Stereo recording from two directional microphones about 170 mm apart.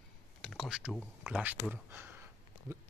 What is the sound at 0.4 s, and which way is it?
Speech, centre (ahead or behind).